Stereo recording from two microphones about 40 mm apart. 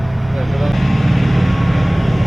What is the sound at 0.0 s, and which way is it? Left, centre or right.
Vehicle, centre.